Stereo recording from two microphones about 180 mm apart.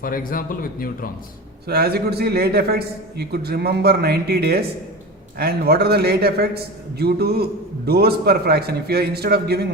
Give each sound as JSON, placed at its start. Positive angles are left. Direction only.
{"t": 0.0, "sound": "speech", "side_deg": 50}
{"t": 1.6, "sound": "a man's voice", "side_deg": -60}